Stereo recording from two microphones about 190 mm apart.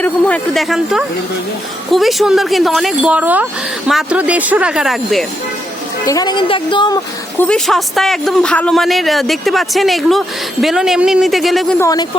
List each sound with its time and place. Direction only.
0.0 s a man's voice: 5° left (ahead or behind)
6.1 s a woman's voice: 20° left (ahead or behind)
7.3 s a man's voice: 5° left (ahead or behind)
11.8 s a woman's voice: 20° left (ahead or behind)